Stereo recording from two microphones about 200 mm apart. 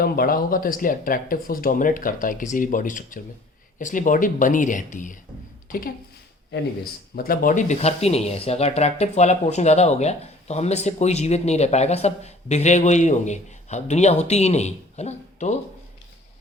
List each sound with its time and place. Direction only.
0.0 s a woman's voice: 45° left (ahead or behind)
7.2 s speech: 45° left (ahead or behind)